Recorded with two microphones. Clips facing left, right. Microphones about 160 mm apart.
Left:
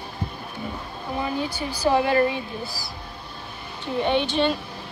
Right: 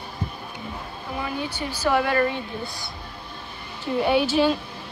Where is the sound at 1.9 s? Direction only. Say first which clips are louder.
Left 2 dB; 20° left (ahead or behind).